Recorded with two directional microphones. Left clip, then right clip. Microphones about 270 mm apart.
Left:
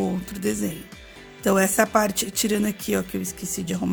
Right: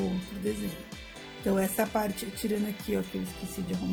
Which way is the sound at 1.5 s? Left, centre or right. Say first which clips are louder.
Left 9 dB; left.